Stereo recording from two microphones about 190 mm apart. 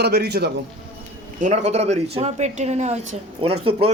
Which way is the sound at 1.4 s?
40° right (ahead or behind).